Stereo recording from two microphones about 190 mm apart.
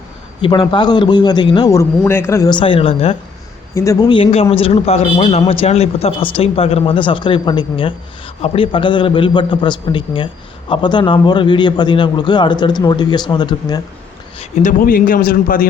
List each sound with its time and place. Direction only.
0.4 s a man's voice: 25° left (ahead or behind)
3.8 s a man's voice: 20° left (ahead or behind)
14.3 s a man's voice: 40° left (ahead or behind)